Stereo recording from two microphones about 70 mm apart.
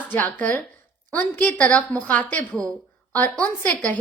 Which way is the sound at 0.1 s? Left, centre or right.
Left.